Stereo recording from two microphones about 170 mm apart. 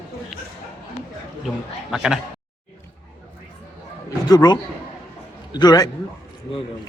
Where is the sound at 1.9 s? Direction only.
5° right (ahead or behind).